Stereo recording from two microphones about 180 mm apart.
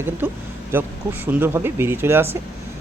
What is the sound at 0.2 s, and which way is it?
Speech, 10° right (ahead or behind).